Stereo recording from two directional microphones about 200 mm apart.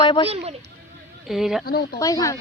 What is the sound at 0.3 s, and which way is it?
Speech, 30° right (ahead or behind).